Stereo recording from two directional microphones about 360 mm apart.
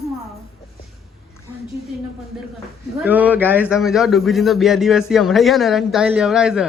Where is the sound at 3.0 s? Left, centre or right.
Centre.